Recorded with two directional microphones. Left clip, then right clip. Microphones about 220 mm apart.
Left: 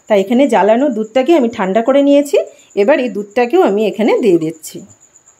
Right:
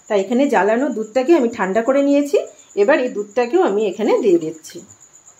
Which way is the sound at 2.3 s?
45° left (ahead or behind).